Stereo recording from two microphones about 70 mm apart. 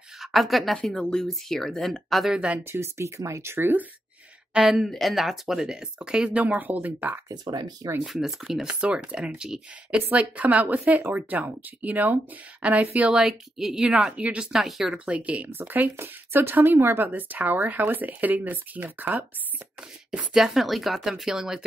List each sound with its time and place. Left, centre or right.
0.2 s a woman's voice: centre
2.3 s speech: centre
2.6 s speech: right
4.6 s speech: centre; by 7.2 s right
7.2 s speech: right
8.0 s speech: centre
8.6 s speech: centre
15.0 s speech: centre
20.1 s speech: centre